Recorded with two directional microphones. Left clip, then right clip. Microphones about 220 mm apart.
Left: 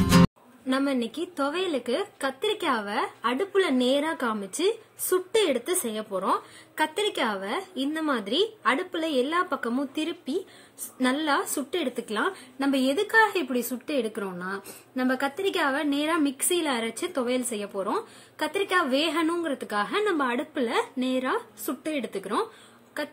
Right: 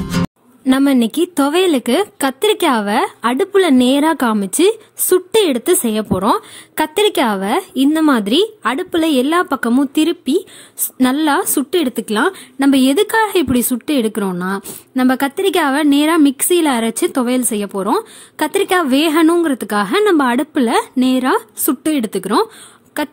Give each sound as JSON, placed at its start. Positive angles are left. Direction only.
{"t": 0.7, "sound": "a woman's voice", "side_deg": -50}